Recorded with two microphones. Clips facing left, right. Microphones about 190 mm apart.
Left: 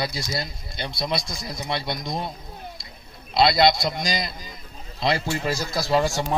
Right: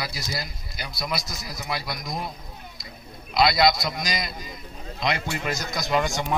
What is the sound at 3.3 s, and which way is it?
A man's voice, 30° left (ahead or behind).